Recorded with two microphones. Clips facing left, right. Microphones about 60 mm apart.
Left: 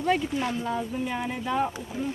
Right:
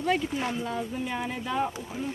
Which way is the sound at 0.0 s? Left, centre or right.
Centre.